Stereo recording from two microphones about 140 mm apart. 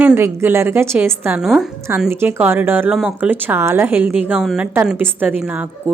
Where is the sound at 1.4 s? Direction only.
Centre (ahead or behind).